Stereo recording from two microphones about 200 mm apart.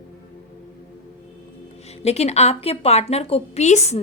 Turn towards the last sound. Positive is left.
turn(degrees=35)  # may be behind; listen again after turning